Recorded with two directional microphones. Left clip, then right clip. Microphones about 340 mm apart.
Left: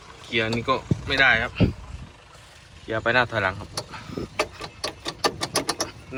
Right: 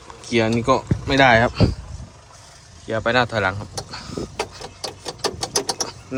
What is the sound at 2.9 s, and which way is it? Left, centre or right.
Speech, centre.